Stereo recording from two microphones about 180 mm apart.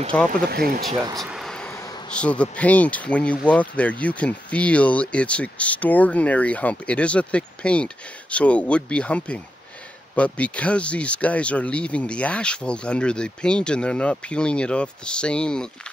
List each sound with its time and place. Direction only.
0.1 s speech: 5° left (ahead or behind)
0.5 s speech: 60° right (ahead or behind)
1.2 s vehicle: centre (ahead or behind)
1.7 s bee: 15° left (ahead or behind)
2.0 s speech: 5° left (ahead or behind)